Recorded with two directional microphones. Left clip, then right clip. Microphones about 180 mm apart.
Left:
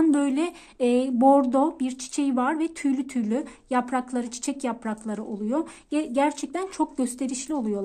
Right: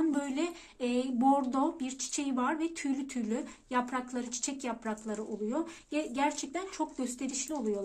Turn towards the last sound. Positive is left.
turn(degrees=45)  # may be behind; listen again after turning